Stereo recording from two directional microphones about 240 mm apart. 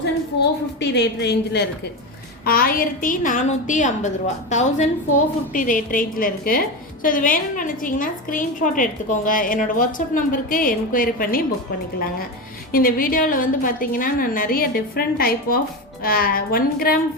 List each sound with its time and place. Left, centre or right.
0.8 s a woman's voice: left
12.7 s a woman's voice: left